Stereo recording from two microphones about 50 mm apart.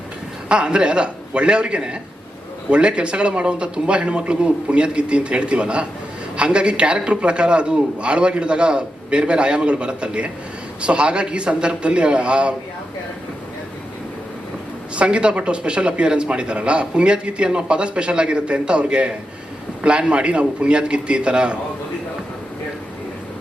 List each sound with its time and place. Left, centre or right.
0.4 s speech: right
14.9 s speech: right